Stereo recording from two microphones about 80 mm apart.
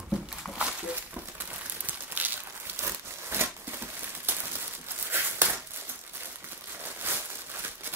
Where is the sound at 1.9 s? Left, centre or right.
Right.